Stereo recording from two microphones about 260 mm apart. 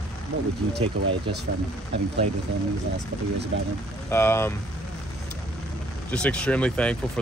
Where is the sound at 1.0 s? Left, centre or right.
Right.